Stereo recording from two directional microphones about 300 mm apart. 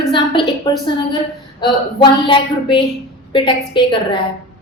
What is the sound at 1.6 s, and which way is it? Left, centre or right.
A woman's voice, centre.